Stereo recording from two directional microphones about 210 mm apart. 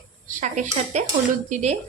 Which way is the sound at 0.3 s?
35° right (ahead or behind).